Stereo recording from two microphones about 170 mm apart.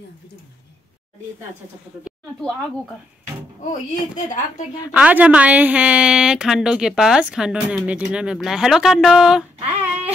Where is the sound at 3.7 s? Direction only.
45° left (ahead or behind).